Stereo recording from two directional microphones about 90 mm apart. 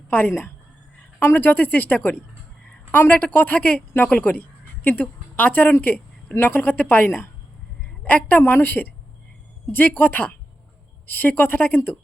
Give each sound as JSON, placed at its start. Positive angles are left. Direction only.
{"t": 0.1, "sound": "a woman's voice", "side_deg": 25}